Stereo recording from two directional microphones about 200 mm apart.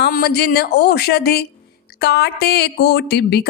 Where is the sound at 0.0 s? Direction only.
50° left (ahead or behind).